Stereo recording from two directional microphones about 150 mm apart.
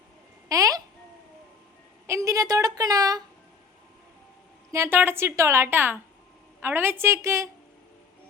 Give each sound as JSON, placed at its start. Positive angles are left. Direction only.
{"t": 0.4, "sound": "a sound", "side_deg": -25}
{"t": 2.0, "sound": "a woman's voice", "side_deg": -20}
{"t": 4.7, "sound": "a woman's voice", "side_deg": -15}